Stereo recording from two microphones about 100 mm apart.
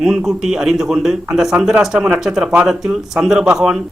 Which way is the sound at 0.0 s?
5° right (ahead or behind).